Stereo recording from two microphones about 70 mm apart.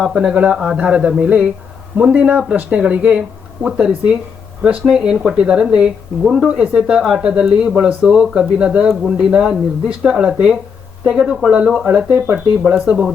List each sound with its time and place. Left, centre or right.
0.0 s speech: centre